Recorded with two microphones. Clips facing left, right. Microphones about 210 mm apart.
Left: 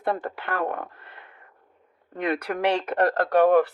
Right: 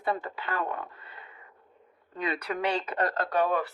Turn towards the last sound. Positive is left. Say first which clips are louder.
# left 9 dB
turn(degrees=55)  # may be behind; listen again after turning